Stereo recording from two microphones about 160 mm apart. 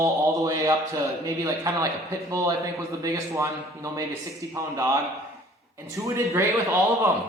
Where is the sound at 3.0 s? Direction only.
20° right (ahead or behind).